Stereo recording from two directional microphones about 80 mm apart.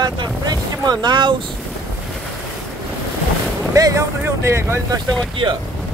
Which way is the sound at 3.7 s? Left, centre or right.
Right.